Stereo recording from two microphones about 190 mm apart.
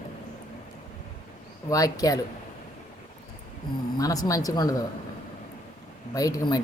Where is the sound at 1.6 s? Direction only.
20° left (ahead or behind).